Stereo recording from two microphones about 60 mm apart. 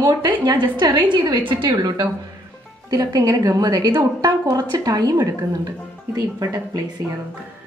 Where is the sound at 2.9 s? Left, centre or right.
Right.